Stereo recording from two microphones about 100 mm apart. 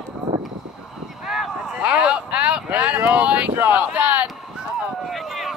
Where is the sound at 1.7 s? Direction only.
15° right (ahead or behind).